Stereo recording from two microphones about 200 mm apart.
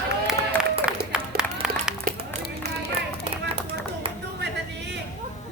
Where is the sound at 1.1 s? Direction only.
5° right (ahead or behind).